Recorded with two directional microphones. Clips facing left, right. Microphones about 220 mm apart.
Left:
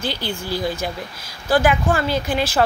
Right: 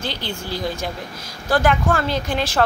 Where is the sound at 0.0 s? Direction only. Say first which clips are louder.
Left 2 dB; 5° left (ahead or behind).